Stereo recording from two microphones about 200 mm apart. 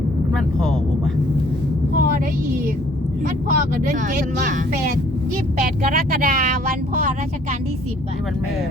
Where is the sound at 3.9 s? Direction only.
45° right (ahead or behind).